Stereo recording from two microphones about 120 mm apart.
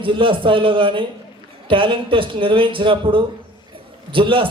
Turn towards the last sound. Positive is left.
turn(degrees=-45)  # may be behind; listen again after turning